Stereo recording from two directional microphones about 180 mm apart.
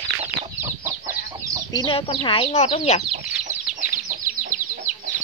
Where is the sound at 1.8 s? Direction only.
30° left (ahead or behind).